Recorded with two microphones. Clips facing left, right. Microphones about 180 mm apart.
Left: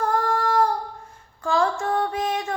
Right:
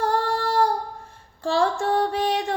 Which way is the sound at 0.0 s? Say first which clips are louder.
Even; 35° right (ahead or behind).